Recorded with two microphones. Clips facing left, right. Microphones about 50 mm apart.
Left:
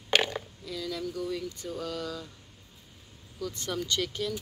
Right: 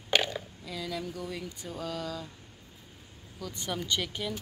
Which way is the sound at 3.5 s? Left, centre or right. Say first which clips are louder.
Right 1 dB; centre.